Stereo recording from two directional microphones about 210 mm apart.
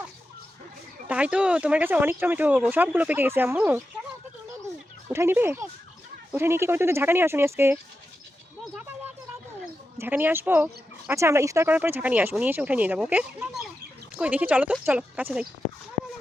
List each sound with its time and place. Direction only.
1.0 s speech: 5° right (ahead or behind)
5.1 s speech: 10° right (ahead or behind)
10.0 s speech: 10° right (ahead or behind)